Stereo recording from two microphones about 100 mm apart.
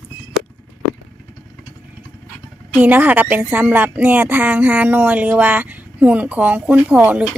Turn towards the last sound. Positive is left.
turn(degrees=-15)  # may be behind; listen again after turning